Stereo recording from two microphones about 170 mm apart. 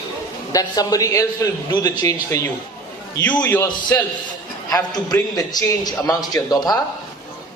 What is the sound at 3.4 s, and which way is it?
A man's voice, 10° left (ahead or behind).